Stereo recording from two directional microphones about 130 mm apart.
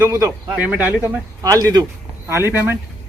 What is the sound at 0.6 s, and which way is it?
Speech, 10° right (ahead or behind).